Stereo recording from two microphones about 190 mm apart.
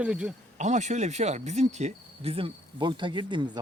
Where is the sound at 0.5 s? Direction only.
40° right (ahead or behind).